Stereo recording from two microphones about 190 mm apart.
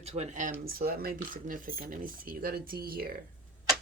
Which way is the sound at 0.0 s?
35° right (ahead or behind).